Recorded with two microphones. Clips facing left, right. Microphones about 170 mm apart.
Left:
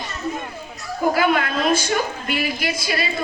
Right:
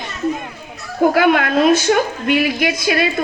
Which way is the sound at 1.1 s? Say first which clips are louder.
Right 3 dB; 55° right (ahead or behind).